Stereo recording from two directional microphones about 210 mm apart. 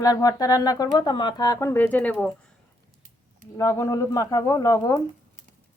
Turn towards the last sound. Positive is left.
turn(degrees=15)  # may be behind; listen again after turning